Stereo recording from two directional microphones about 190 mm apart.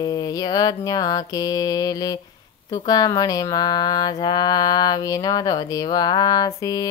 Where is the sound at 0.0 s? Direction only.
20° left (ahead or behind).